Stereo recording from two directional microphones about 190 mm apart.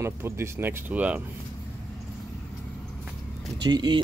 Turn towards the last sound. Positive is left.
turn(degrees=-20)  # may be behind; listen again after turning